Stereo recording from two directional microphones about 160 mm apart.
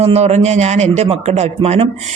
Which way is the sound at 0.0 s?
40° right (ahead or behind).